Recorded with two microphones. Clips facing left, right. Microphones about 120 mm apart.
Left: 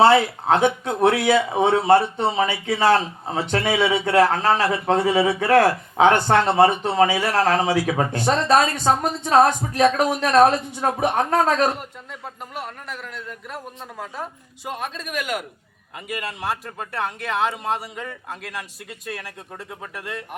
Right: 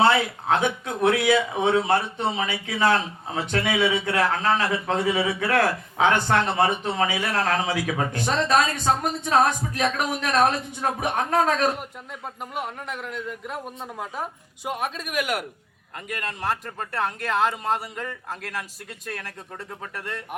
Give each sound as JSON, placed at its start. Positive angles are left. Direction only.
{"t": 0.0, "sound": "a man's voice", "side_deg": 45}
{"t": 1.6, "sound": "a man's voice", "side_deg": 40}
{"t": 3.8, "sound": "a man's voice", "side_deg": 50}
{"t": 12.5, "sound": "speech", "side_deg": -20}
{"t": 16.0, "sound": "speech", "side_deg": 5}